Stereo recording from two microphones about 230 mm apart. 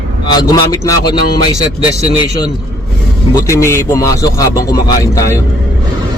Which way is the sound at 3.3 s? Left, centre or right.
Centre.